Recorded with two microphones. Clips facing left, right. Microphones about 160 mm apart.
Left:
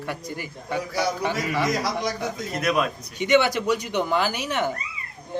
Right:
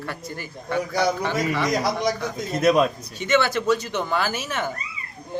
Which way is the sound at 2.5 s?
25° right (ahead or behind).